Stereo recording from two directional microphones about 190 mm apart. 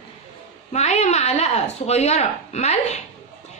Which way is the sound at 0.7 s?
35° left (ahead or behind).